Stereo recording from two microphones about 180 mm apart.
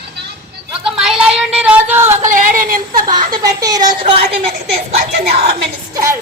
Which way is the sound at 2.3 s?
50° right (ahead or behind).